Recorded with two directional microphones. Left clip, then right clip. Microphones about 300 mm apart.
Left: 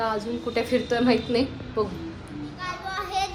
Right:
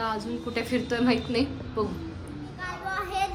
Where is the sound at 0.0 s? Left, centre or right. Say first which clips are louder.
Left 4 dB; centre.